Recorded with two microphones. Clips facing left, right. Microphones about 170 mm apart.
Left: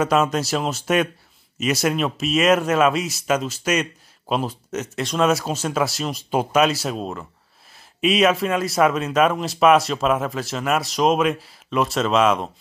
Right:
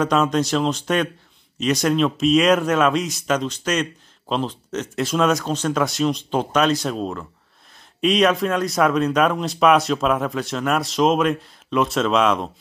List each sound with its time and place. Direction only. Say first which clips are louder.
0.0 s speech: right 1 dB; 5° left (ahead or behind)